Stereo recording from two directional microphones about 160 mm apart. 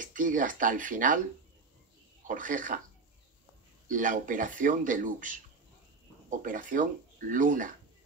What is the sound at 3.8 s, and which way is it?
Speech, 55° right (ahead or behind).